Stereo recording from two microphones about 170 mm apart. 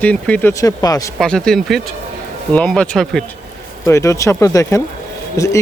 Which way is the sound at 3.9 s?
15° left (ahead or behind).